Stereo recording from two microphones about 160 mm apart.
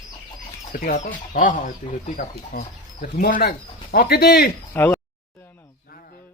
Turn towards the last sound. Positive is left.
turn(degrees=15)  # may be behind; listen again after turning